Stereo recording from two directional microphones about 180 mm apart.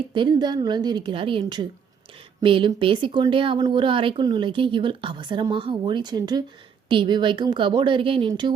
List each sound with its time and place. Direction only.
0.1 s speech: 25° right (ahead or behind)